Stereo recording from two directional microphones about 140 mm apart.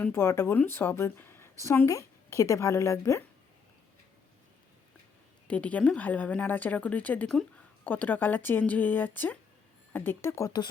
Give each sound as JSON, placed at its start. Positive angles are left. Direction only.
{"t": 0.0, "sound": "a woman's voice", "side_deg": 15}
{"t": 5.5, "sound": "a woman's voice", "side_deg": 10}